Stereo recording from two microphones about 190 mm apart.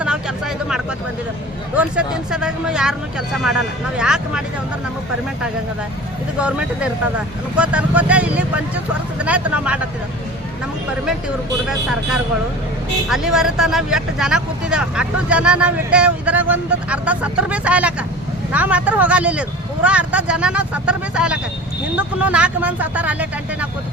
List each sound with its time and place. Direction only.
0.0 s a sound: 5° right (ahead or behind)
1.7 s speech: 5° right (ahead or behind)
6.4 s speech: 5° right (ahead or behind)
11.7 s speech: 5° right (ahead or behind)